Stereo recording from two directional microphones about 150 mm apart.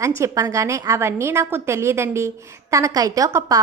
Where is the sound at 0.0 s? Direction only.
20° right (ahead or behind).